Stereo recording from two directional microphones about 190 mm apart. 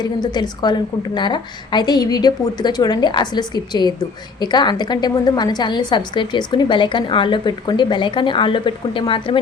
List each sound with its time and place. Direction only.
0.0 s a woman's voice: 20° left (ahead or behind)